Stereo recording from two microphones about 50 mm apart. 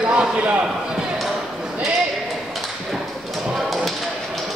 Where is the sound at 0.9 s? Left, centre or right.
Centre.